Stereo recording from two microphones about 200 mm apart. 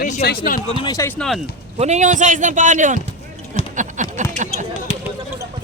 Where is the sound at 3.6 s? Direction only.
30° left (ahead or behind).